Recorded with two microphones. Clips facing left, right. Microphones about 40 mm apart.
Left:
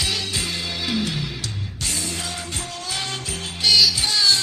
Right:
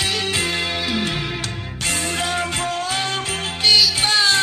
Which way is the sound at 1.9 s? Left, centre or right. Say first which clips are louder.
Right 7 dB; right.